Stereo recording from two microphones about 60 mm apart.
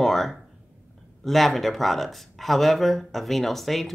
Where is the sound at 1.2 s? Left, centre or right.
Centre.